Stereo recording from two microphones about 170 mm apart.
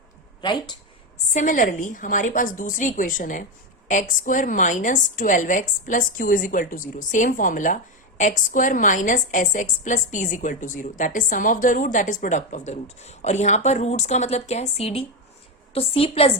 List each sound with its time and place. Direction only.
0.4 s speech: 25° left (ahead or behind)
1.3 s a woman's voice: 45° left (ahead or behind)